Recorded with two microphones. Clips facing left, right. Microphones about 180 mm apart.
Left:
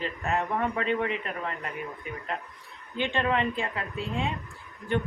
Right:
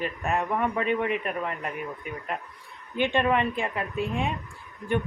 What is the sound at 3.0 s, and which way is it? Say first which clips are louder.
A woman's voice: right 3 dB; 15° right (ahead or behind).